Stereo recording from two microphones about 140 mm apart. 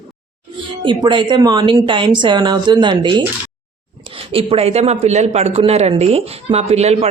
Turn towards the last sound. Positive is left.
turn(degrees=-50)  # may be behind; listen again after turning